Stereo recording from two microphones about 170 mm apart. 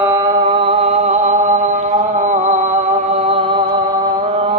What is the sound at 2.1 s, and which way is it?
Music, 45° right (ahead or behind).